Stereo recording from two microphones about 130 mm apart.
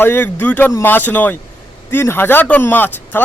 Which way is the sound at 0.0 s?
15° left (ahead or behind).